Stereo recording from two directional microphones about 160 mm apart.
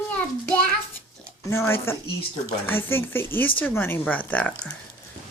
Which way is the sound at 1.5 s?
15° left (ahead or behind).